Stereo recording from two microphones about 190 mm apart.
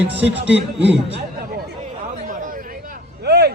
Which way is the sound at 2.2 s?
45° right (ahead or behind).